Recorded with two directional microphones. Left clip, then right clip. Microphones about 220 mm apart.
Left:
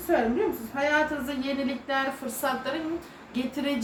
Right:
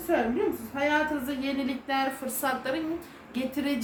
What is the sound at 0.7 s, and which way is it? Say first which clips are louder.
A woman's voice: left 2 dB; 15° right (ahead or behind).